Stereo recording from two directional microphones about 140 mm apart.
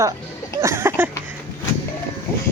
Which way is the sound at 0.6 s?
15° right (ahead or behind).